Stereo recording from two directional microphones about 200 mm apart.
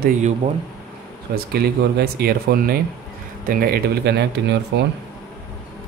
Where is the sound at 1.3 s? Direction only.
50° right (ahead or behind).